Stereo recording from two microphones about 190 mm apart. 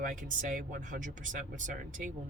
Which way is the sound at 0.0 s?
45° right (ahead or behind).